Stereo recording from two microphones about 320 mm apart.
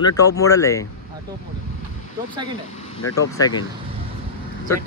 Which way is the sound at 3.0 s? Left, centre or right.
Left.